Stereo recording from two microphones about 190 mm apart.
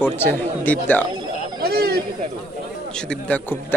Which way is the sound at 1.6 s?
55° right (ahead or behind).